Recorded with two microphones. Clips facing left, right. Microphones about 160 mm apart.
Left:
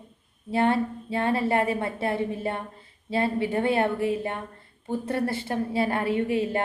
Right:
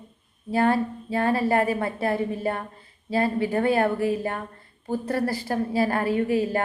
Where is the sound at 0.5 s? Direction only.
25° left (ahead or behind).